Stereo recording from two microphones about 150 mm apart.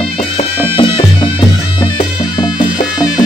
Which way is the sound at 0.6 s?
35° left (ahead or behind).